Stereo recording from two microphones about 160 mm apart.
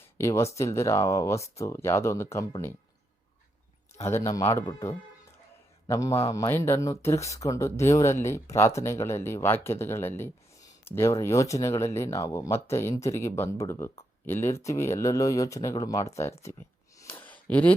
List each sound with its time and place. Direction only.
0.2 s speech: 20° left (ahead or behind)
4.0 s speech: 20° left (ahead or behind)
17.0 s a sound: 10° left (ahead or behind)